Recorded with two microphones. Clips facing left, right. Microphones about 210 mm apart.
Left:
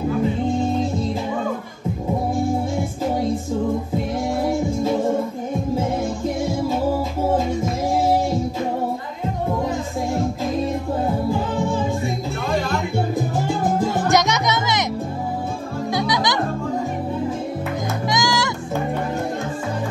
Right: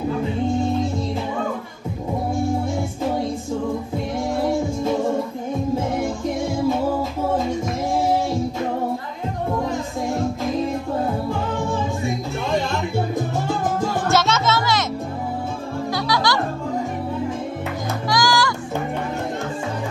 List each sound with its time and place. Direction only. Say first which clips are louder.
13.8 s music: even; 15° left (ahead or behind)
15.9 s music: left 1 dB; 20° left (ahead or behind)
18.0 s music: right 3 dB; 20° left (ahead or behind)